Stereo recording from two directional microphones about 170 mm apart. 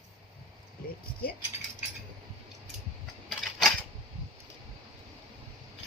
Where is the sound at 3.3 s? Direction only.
Centre (ahead or behind).